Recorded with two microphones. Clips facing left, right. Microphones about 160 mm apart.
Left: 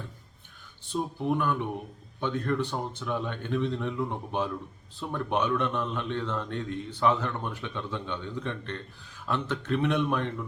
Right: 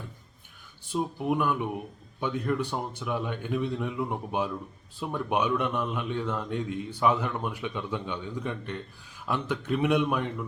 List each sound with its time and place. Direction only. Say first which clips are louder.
0.9 s a man's voice: right 1 dB; 10° right (ahead or behind)